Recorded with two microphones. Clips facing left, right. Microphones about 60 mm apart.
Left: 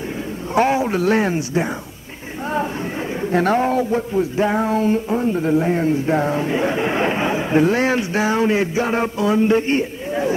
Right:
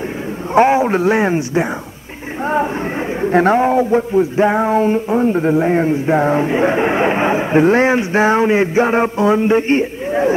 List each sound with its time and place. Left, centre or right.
0.6 s speech: right
3.2 s bird: right
3.5 s speech: right